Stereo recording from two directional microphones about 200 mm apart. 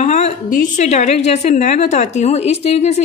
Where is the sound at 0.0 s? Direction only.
35° left (ahead or behind).